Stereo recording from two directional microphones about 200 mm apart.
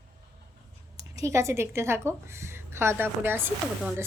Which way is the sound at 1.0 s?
15° right (ahead or behind).